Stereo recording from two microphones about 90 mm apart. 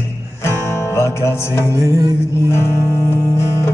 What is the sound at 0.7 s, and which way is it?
Music, 30° left (ahead or behind).